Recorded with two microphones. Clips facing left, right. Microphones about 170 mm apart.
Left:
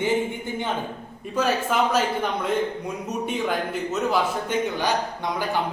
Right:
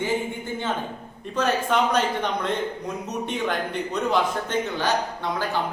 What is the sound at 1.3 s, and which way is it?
A man's voice, 5° left (ahead or behind).